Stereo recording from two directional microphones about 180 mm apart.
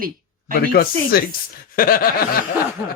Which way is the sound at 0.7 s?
55° left (ahead or behind).